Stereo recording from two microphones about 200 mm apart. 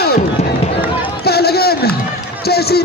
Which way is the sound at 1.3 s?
50° left (ahead or behind).